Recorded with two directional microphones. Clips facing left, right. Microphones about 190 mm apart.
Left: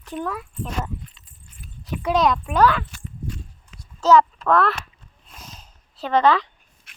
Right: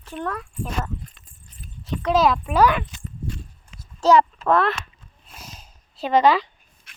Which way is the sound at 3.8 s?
10° right (ahead or behind).